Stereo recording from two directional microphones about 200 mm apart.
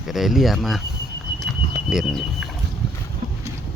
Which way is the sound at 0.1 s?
Centre (ahead or behind).